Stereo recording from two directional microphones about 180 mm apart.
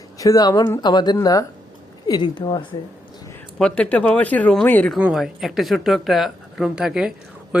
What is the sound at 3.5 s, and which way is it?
Speech, 5° left (ahead or behind).